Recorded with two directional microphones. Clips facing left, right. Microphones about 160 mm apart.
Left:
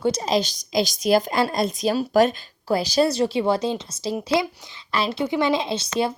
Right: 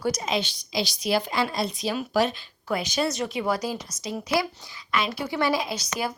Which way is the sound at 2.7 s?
35° left (ahead or behind).